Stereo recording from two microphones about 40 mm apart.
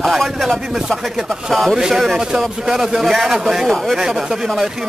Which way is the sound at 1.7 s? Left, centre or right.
Centre.